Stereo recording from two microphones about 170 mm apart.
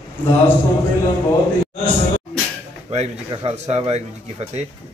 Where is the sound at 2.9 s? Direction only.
40° right (ahead or behind).